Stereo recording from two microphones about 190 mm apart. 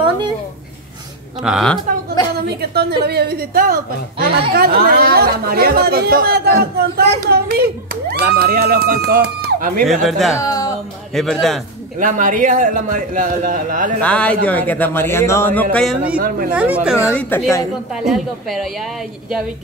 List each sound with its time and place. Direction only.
1.4 s a woman's voice: centre (ahead or behind)
2.4 s a woman's voice: 55° right (ahead or behind)
10.0 s a woman's voice: centre (ahead or behind)
10.3 s speech: 20° left (ahead or behind)
11.1 s a woman's voice: centre (ahead or behind)
12.0 s speech: 45° right (ahead or behind)
14.0 s a man's voice: 5° left (ahead or behind)
16.2 s speech: 50° right (ahead or behind)
16.5 s a woman's voice: 5° right (ahead or behind)
17.1 s a man's voice: 5° left (ahead or behind)
17.9 s a woman's voice: centre (ahead or behind)